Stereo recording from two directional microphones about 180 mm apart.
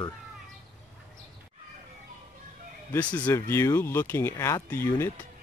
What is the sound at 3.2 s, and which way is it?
Speech, 15° left (ahead or behind).